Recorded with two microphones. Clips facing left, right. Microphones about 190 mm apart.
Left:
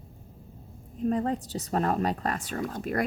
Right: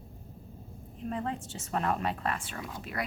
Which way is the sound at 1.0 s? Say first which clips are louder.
Left 8 dB; 40° left (ahead or behind).